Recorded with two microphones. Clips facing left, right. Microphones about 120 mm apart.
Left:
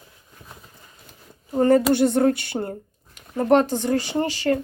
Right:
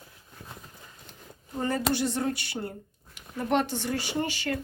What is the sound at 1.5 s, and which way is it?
Speech, 55° left (ahead or behind).